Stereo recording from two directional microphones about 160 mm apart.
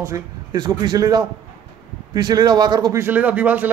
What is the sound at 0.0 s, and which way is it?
A man's voice, 20° right (ahead or behind).